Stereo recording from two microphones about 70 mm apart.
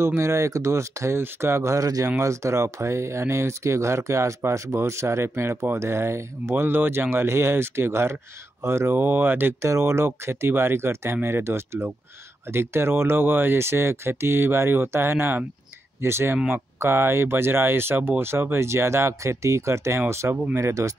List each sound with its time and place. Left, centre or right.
0.0 s speech: right